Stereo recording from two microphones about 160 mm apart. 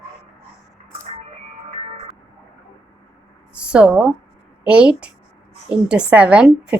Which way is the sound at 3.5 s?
5° right (ahead or behind).